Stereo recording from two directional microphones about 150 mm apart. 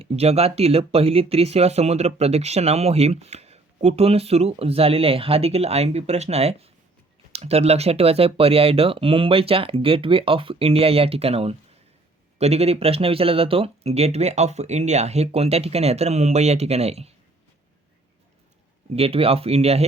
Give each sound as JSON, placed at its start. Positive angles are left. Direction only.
{"t": 0.0, "sound": "speech", "side_deg": -40}
{"t": 18.9, "sound": "speech", "side_deg": -40}